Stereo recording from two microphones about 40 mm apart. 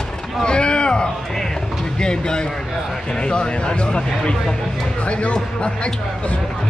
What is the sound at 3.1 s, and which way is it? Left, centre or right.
Speech, left.